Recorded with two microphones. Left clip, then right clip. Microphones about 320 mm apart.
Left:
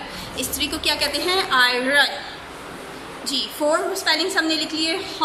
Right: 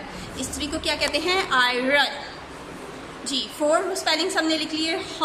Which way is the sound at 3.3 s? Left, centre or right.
Centre.